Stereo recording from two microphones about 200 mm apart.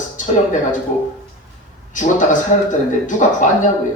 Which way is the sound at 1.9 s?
40° left (ahead or behind).